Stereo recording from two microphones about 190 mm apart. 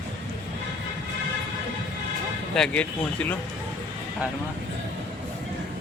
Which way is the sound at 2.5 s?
5° left (ahead or behind).